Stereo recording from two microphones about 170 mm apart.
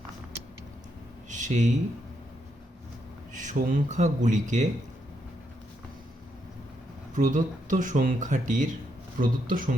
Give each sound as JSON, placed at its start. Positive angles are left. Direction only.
{"t": 1.3, "sound": "a sound", "side_deg": -45}
{"t": 3.3, "sound": "speech", "side_deg": -50}
{"t": 7.2, "sound": "speech", "side_deg": -50}